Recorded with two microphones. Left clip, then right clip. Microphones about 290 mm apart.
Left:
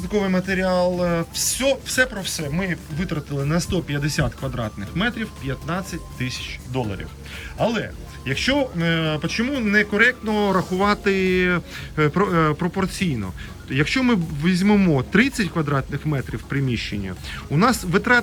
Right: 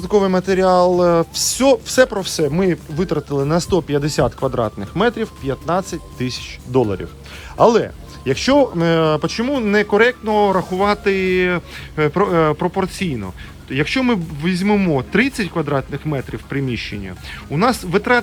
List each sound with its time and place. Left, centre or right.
0.1 s speech: centre
7.7 s speech: centre